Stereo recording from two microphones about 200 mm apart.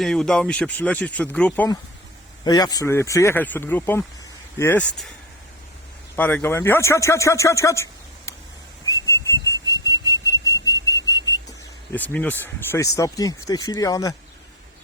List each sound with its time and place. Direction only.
0.0 s speech: 5° left (ahead or behind)
6.1 s speech: 10° left (ahead or behind)
8.9 s whistle: 15° left (ahead or behind)
9.6 s alarm clock: 15° left (ahead or behind)
11.9 s speech: 10° left (ahead or behind)